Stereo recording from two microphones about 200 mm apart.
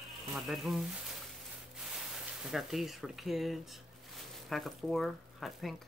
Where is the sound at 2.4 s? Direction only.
Centre (ahead or behind).